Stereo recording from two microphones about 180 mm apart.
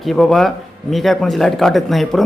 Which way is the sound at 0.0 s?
Centre (ahead or behind).